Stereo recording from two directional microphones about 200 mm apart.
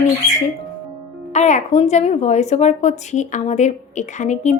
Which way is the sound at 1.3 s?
35° left (ahead or behind).